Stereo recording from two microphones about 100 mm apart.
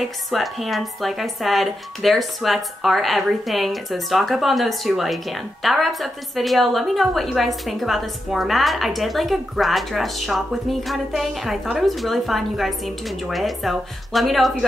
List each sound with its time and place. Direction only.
0.0 s a woman's voice: centre (ahead or behind)